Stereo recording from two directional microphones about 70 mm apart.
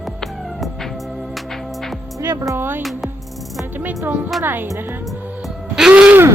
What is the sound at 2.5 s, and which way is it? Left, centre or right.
Speech, right.